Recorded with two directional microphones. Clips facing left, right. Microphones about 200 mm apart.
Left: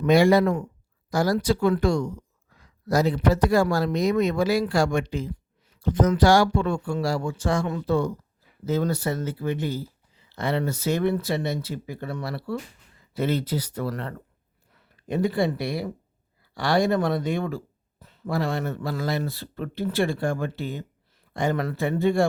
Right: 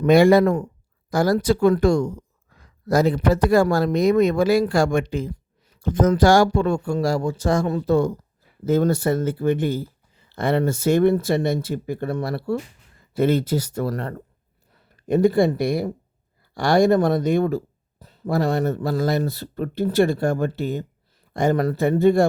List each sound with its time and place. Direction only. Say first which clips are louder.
0.0 s speech: right 4 dB; 55° right (ahead or behind)